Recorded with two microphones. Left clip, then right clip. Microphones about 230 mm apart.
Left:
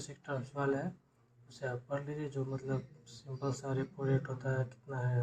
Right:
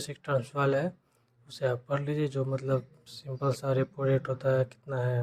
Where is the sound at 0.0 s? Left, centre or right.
Right.